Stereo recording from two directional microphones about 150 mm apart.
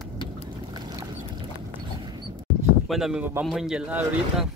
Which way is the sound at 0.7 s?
25° right (ahead or behind).